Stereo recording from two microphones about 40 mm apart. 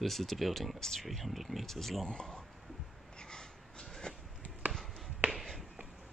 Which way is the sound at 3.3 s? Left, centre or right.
Centre.